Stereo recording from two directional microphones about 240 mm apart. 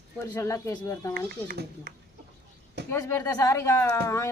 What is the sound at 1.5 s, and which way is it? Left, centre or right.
Speech, right.